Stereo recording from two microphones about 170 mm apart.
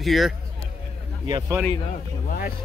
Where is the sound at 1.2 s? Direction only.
25° right (ahead or behind).